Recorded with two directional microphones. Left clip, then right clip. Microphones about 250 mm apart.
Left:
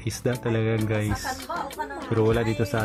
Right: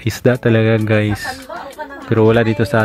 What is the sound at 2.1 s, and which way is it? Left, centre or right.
Speech, right.